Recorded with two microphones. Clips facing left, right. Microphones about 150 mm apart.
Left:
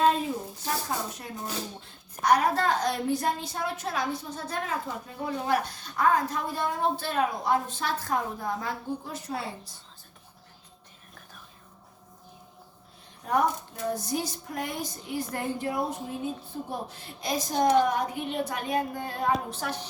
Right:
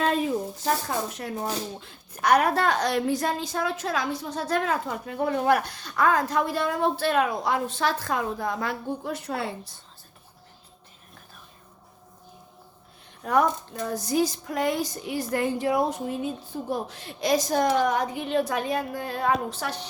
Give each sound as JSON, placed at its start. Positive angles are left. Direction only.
{"t": 1.1, "sound": "a woman's voice", "side_deg": -90}
{"t": 13.2, "sound": "a woman's voice", "side_deg": -90}